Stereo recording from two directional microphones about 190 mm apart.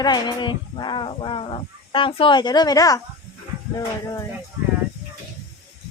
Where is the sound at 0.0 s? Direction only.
20° left (ahead or behind).